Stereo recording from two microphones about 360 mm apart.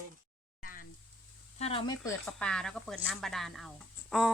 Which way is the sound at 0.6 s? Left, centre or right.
Left.